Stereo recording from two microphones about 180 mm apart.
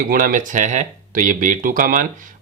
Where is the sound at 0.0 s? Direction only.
50° right (ahead or behind).